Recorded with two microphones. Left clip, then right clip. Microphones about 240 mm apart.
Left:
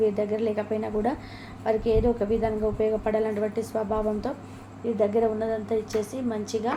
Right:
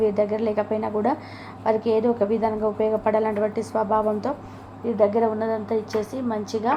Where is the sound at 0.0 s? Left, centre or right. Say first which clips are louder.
Right 3 dB; centre.